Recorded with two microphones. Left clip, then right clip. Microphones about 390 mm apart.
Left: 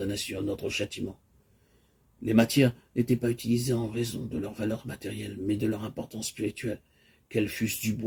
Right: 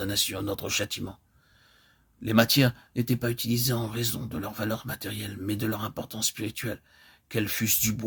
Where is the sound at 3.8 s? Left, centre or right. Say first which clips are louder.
Even; right.